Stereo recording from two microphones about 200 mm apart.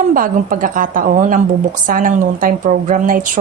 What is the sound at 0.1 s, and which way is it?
A woman's voice, 45° right (ahead or behind).